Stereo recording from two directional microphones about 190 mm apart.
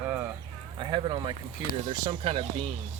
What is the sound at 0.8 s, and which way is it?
Speech, 25° right (ahead or behind).